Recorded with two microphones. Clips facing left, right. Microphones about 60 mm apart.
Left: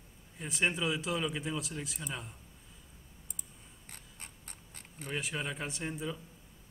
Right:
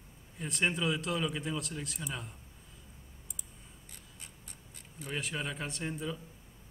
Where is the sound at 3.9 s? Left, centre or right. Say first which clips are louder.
Left 4 dB; left.